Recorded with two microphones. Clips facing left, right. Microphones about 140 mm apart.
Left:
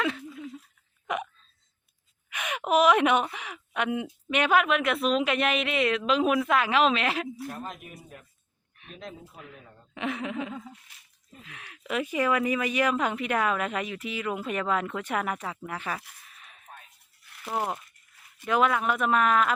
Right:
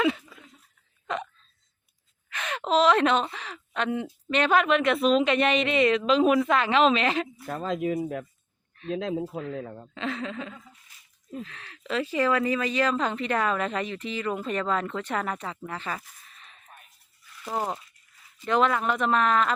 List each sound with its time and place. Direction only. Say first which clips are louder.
1.0 s hiccup: even; 10° left (ahead or behind)
2.3 s a sound: even; 10° left (ahead or behind)
3.3 s speech: even; 15° left (ahead or behind)
7.4 s speech: right 10 dB; 90° right
9.9 s speech: left 1 dB; 15° left (ahead or behind)
16.3 s a sound: even; 5° left (ahead or behind)
16.6 s music: left 4 dB; 90° left
17.4 s speech: right 1 dB; 5° left (ahead or behind)